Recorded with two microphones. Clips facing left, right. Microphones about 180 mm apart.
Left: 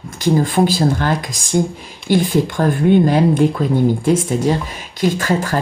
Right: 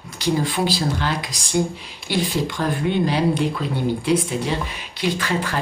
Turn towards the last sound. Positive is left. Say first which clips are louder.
# left 6 dB
turn(degrees=45)  # may be behind; listen again after turning